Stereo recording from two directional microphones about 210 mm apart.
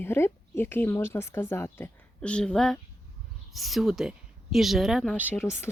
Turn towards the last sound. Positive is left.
turn(degrees=10)  # may be behind; listen again after turning